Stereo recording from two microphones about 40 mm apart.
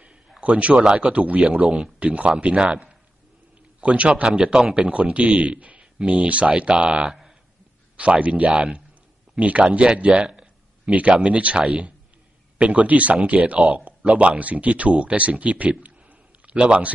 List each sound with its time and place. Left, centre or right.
0.4 s a man's voice: right
4.2 s a man's voice: centre; by 15.7 s right
15.8 s a sound: right
16.5 s speech: right